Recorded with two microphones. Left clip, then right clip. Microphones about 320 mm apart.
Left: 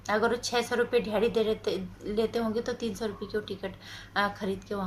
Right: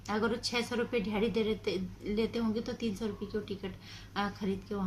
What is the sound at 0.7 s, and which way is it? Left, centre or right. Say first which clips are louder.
Speech: left 7 dB; left.